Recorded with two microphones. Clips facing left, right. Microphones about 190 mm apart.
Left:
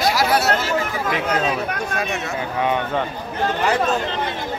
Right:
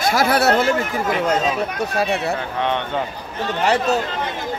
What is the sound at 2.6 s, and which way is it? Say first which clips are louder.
Speech: left 4 dB; 5° left (ahead or behind).